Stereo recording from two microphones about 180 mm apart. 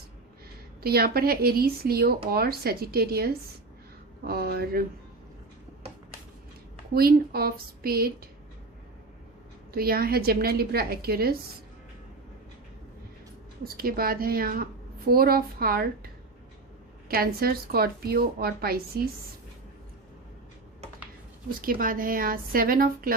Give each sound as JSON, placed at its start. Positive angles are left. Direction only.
{"t": 0.8, "sound": "speech", "side_deg": -60}
{"t": 6.9, "sound": "speech", "side_deg": -55}
{"t": 9.7, "sound": "speech", "side_deg": -55}
{"t": 13.7, "sound": "speech", "side_deg": -55}
{"t": 17.1, "sound": "speech", "side_deg": -55}
{"t": 21.6, "sound": "a woman's voice", "side_deg": -50}